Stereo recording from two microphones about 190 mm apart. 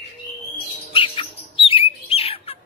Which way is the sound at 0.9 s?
30° left (ahead or behind).